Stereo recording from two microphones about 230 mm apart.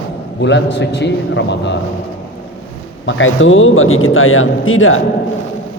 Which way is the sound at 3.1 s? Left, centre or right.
Left.